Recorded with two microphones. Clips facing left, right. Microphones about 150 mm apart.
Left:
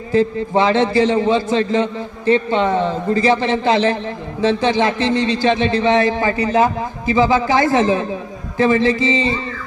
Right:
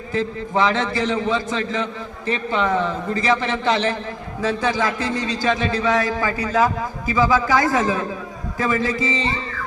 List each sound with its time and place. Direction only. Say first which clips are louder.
0.1 s a man's voice: left 7 dB; 30° left (ahead or behind)